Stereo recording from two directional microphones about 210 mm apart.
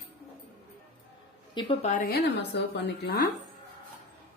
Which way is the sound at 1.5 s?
25° left (ahead or behind).